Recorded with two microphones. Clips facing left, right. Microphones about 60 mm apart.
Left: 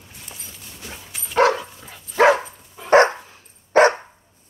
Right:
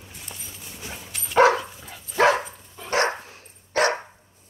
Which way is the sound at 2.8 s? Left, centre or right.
Left.